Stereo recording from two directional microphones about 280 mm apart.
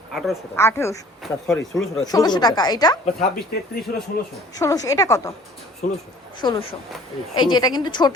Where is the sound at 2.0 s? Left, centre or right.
Centre.